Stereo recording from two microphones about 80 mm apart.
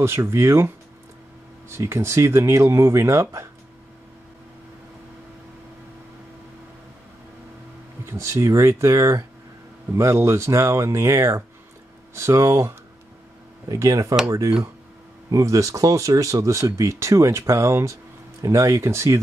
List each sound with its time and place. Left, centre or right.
0.0 s speech: right
1.7 s speech: right
8.1 s speech: right
15.2 s speech: right